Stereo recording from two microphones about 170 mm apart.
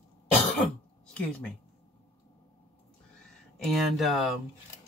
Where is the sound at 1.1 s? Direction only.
5° left (ahead or behind).